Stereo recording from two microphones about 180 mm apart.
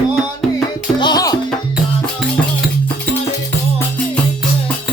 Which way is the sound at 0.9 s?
25° left (ahead or behind).